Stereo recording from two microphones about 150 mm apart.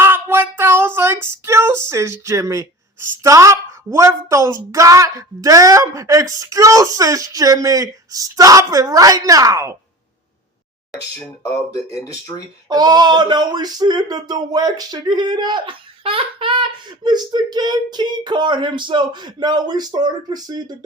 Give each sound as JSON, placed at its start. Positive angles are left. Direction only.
{"t": 0.0, "sound": "female singing", "side_deg": -15}
{"t": 2.2, "sound": "speech", "side_deg": -20}
{"t": 11.7, "sound": "speech", "side_deg": 25}
{"t": 12.6, "sound": "speech", "side_deg": -25}